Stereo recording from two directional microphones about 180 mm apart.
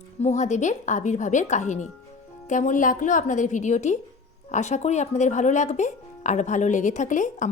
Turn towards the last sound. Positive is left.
turn(degrees=45)  # may be behind; listen again after turning